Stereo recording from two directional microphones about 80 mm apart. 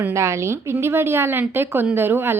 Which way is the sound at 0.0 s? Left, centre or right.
Right.